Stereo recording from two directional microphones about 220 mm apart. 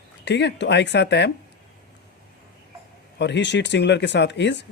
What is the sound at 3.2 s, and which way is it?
Speech, 50° left (ahead or behind).